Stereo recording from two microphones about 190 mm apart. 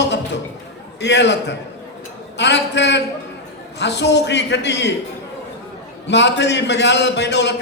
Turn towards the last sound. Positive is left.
turn(degrees=65)  # may be behind; listen again after turning